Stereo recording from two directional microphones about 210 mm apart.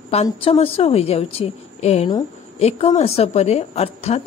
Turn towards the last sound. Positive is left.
turn(degrees=30)  # may be behind; listen again after turning